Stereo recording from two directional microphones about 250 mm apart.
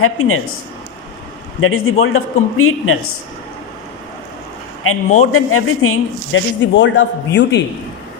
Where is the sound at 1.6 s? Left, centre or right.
Left.